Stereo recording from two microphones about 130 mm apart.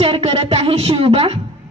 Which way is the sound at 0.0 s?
50° right (ahead or behind).